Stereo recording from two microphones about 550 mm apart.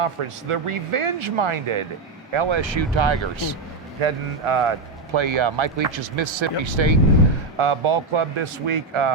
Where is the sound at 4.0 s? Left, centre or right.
Right.